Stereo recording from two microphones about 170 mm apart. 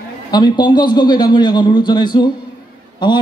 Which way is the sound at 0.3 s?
25° left (ahead or behind).